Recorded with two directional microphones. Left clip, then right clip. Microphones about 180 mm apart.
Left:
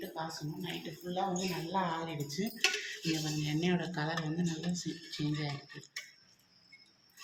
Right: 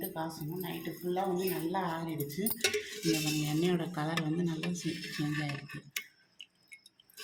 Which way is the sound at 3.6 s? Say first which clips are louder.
Even; 30° right (ahead or behind).